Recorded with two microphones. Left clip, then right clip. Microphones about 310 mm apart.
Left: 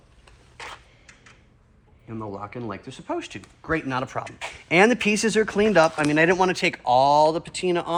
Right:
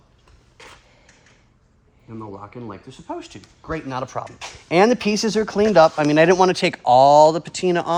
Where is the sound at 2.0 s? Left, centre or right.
Centre.